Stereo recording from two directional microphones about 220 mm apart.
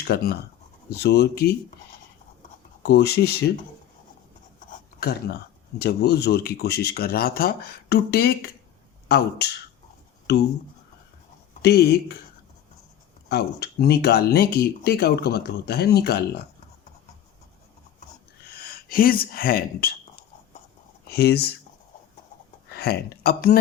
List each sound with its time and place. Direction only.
0.1 s speech: 45° left (ahead or behind)
2.8 s speech: 50° left (ahead or behind)
4.9 s speech: 50° left (ahead or behind)
11.6 s speech: 45° left (ahead or behind)
13.2 s speech: 45° left (ahead or behind)
18.5 s speech: 45° left (ahead or behind)
21.1 s speech: 45° left (ahead or behind)
22.7 s speech: 45° left (ahead or behind)